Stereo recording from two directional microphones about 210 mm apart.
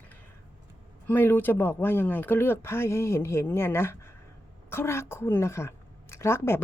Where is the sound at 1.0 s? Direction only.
10° left (ahead or behind).